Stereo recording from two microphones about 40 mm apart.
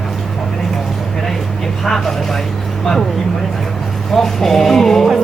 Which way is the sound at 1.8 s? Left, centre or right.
Centre.